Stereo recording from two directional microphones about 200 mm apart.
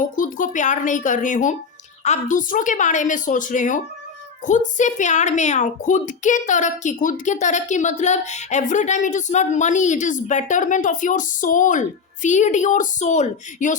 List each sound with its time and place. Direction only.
0.0 s a woman's voice: 40° left (ahead or behind)